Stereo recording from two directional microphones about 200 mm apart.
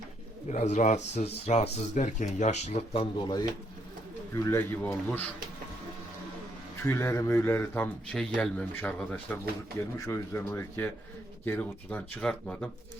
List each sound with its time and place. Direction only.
0.4 s a man's voice: 35° left (ahead or behind); by 5.2 s 10° left (ahead or behind)
6.8 s a man's voice: 15° left (ahead or behind)